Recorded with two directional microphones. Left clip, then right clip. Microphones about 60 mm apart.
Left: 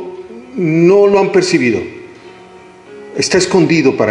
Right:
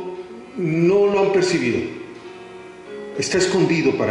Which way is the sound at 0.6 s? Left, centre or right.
Left.